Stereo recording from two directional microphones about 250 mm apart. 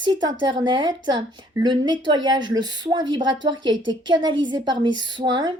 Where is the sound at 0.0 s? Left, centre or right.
Centre.